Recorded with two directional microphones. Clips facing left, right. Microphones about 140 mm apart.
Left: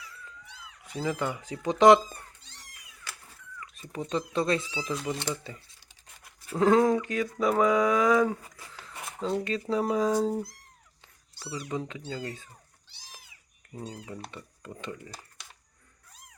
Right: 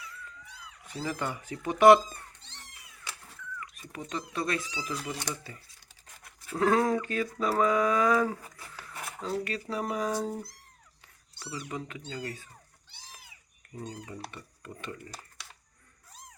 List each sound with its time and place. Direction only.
0.9 s speech: 15° left (ahead or behind)
3.6 s speech: 30° left (ahead or behind)
11.0 s a sound: 25° left (ahead or behind)
12.1 s speech: 25° left (ahead or behind)
14.3 s speech: 20° left (ahead or behind)